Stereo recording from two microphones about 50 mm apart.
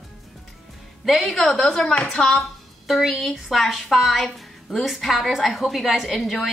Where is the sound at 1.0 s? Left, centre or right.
Centre.